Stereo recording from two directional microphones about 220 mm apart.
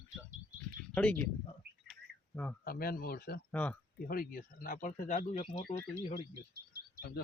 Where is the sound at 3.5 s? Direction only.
5° left (ahead or behind).